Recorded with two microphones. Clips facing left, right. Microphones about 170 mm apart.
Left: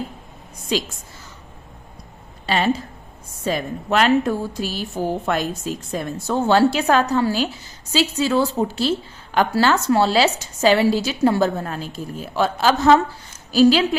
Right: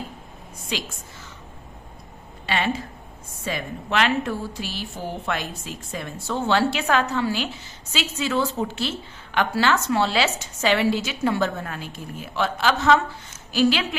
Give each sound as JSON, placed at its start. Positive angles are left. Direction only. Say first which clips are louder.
{"t": 0.7, "sound": "a woman's voice", "louder": "left 7 dB", "side_deg": 40}
{"t": 2.5, "sound": "a woman's voice", "louder": "left 5 dB", "side_deg": 35}